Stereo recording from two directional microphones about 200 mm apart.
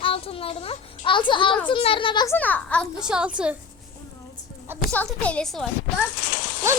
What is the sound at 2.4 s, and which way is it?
A child's voice, 10° left (ahead or behind).